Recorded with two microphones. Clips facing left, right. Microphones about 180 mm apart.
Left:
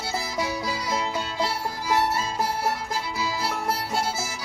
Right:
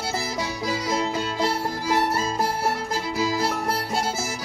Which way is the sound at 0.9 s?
45° right (ahead or behind).